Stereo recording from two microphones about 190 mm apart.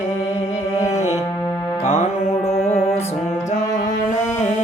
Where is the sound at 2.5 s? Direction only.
35° left (ahead or behind).